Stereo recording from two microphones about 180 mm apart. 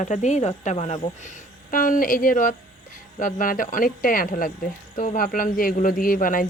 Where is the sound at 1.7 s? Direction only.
50° left (ahead or behind).